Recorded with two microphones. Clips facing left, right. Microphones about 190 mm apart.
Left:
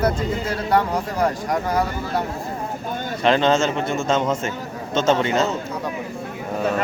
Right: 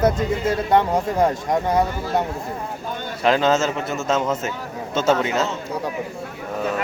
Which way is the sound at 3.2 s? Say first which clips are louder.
Even; 5° right (ahead or behind).